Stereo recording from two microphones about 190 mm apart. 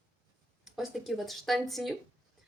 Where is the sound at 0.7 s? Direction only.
Centre (ahead or behind).